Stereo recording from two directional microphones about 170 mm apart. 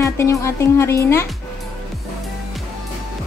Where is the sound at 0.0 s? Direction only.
20° left (ahead or behind).